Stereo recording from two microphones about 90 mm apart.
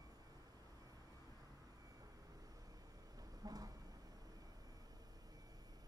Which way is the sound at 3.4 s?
45° right (ahead or behind).